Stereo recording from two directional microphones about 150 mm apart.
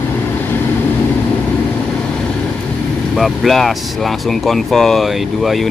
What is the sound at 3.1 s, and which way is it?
Speech, centre (ahead or behind).